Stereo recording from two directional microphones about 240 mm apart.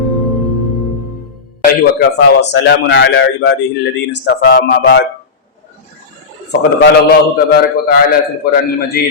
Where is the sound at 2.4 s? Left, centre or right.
Left.